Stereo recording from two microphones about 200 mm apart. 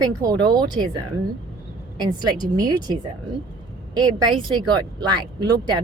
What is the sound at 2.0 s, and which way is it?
A woman's voice, 20° right (ahead or behind).